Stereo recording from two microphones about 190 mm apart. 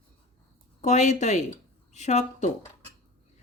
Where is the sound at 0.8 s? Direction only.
40° left (ahead or behind).